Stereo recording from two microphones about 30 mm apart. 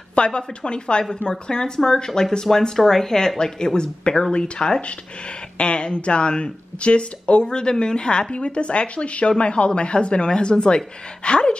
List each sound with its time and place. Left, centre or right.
0.1 s speech: left